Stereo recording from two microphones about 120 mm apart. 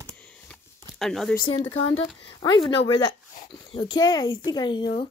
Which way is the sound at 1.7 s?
50° left (ahead or behind).